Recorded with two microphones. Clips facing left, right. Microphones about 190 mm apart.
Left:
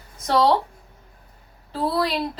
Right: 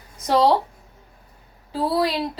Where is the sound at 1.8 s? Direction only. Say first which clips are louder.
Right 1 dB; 15° right (ahead or behind).